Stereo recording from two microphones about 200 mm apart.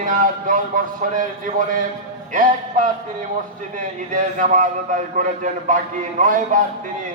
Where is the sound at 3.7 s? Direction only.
40° right (ahead or behind).